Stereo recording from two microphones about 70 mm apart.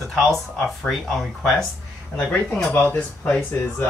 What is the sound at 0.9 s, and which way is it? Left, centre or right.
Speech, centre.